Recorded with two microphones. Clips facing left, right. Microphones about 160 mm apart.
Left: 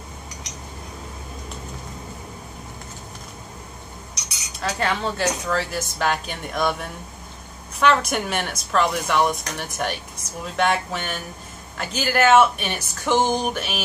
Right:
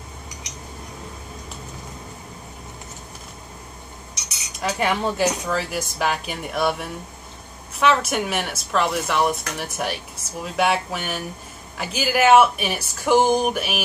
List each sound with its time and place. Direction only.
4.6 s speech: 10° right (ahead or behind)